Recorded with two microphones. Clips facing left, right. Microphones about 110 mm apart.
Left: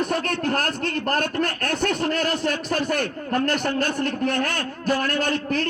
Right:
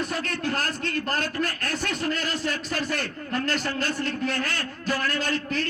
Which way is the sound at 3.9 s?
55° left (ahead or behind).